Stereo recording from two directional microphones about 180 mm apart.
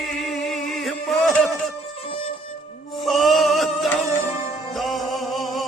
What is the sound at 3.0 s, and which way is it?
Music, centre (ahead or behind).